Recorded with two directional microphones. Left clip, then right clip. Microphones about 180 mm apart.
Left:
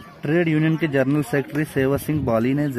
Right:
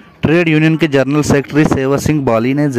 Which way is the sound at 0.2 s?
35° right (ahead or behind).